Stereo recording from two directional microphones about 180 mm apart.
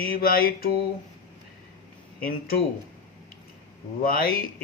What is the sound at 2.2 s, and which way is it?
Speech, 55° left (ahead or behind).